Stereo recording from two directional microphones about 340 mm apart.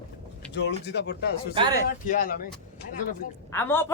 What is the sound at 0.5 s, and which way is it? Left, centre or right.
Speech, left.